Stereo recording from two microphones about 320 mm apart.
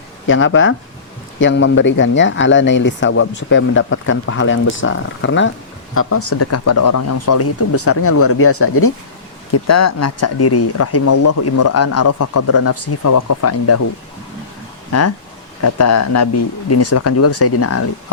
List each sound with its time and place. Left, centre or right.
0.3 s speech: left
6.1 s speech: left
6.7 s speech: left
9.5 s speech: left
11.2 s speech: left
11.7 s speech: left
15.6 s speech: left